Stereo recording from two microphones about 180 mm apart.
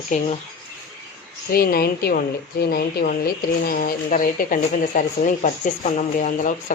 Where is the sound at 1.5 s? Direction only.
55° left (ahead or behind).